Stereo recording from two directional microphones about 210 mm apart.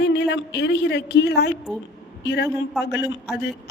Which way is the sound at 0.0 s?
55° left (ahead or behind).